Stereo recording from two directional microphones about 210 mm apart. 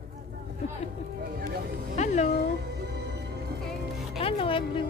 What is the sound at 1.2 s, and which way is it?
Music, 45° right (ahead or behind).